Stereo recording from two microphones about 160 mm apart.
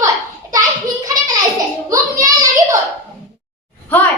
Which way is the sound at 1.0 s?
25° right (ahead or behind).